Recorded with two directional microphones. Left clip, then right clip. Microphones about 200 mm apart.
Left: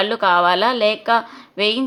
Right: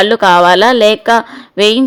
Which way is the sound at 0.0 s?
45° right (ahead or behind).